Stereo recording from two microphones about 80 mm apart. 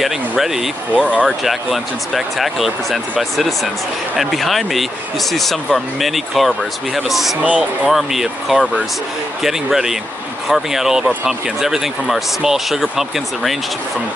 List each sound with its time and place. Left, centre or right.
0.0 s speech: centre
0.9 s speech: centre
1.4 s speech: centre
7.4 s speech: centre
7.9 s speech: centre